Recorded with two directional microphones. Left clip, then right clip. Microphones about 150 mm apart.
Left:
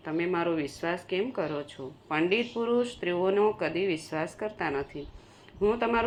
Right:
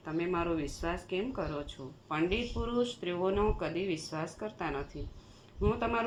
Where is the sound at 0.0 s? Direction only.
30° left (ahead or behind).